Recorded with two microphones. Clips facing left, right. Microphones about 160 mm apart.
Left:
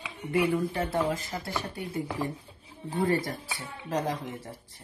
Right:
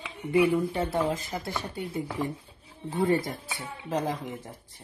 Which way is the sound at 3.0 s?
20° right (ahead or behind).